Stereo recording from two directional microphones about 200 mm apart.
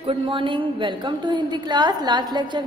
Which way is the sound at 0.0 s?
25° right (ahead or behind).